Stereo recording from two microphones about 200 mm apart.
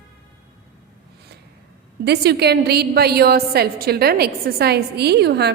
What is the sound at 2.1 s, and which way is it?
A woman's voice, 55° right (ahead or behind).